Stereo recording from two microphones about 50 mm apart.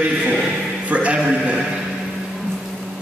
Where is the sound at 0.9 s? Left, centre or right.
Right.